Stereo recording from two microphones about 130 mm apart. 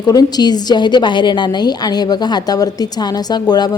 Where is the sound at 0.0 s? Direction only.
30° left (ahead or behind).